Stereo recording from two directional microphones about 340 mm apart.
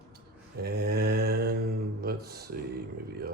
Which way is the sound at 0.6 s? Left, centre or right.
Right.